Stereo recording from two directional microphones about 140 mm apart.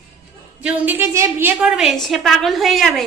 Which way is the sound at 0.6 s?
15° right (ahead or behind).